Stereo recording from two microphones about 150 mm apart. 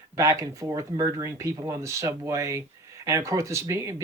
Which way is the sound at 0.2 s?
20° right (ahead or behind).